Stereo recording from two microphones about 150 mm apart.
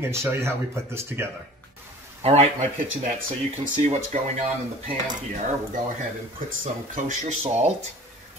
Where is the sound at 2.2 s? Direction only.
40° right (ahead or behind).